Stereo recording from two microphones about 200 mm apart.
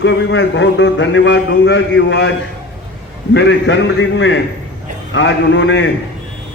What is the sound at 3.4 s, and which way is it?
A man's voice, 65° left (ahead or behind).